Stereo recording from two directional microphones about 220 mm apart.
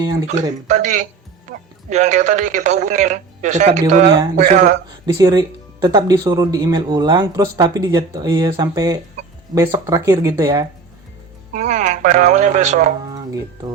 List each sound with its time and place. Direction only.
0.0 s speech: 15° right (ahead or behind)
0.7 s speech: 35° right (ahead or behind)
5.0 s speech: 15° right (ahead or behind)
11.5 s speech: 35° right (ahead or behind)
13.1 s music: 15° right (ahead or behind)